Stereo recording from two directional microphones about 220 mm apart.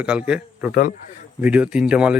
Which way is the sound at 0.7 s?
40° left (ahead or behind).